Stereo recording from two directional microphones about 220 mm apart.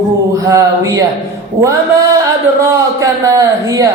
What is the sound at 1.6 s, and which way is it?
Speech, 10° right (ahead or behind).